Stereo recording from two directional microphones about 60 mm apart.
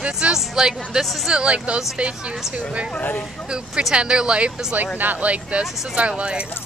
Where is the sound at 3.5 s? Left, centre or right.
Centre.